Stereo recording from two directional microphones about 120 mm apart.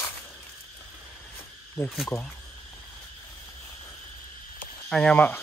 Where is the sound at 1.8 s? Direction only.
20° left (ahead or behind).